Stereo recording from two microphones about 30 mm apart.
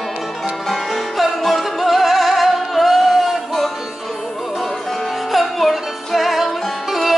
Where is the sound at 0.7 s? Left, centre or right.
Centre.